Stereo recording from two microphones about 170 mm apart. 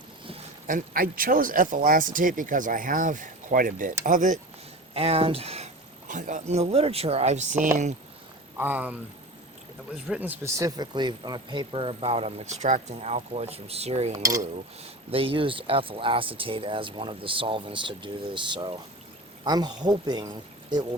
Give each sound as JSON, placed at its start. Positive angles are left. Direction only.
{"t": 0.7, "sound": "speech", "side_deg": -55}
{"t": 4.9, "sound": "speech", "side_deg": -35}
{"t": 8.5, "sound": "speech", "side_deg": -10}
{"t": 10.1, "sound": "speech", "side_deg": -10}
{"t": 14.1, "sound": "speech", "side_deg": -20}
{"t": 15.1, "sound": "speech", "side_deg": -30}